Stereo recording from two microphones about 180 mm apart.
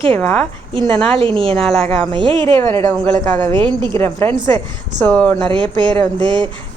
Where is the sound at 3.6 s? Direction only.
25° right (ahead or behind).